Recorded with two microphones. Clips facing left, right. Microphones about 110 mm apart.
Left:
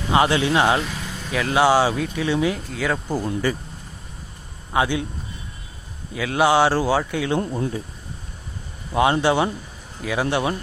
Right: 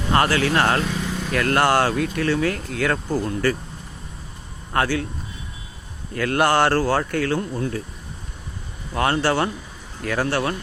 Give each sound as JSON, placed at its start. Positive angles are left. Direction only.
{"t": 0.1, "sound": "speech", "side_deg": 15}
{"t": 3.1, "sound": "speech", "side_deg": 15}
{"t": 4.7, "sound": "speech", "side_deg": 15}
{"t": 6.1, "sound": "speech", "side_deg": 5}
{"t": 7.3, "sound": "speech", "side_deg": 20}
{"t": 8.9, "sound": "speech", "side_deg": 15}